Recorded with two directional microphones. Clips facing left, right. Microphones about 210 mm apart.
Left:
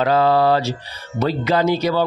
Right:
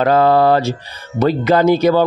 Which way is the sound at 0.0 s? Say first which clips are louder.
Right 4 dB; 50° right (ahead or behind).